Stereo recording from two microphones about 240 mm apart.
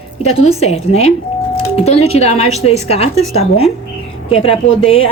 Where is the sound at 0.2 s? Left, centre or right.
Left.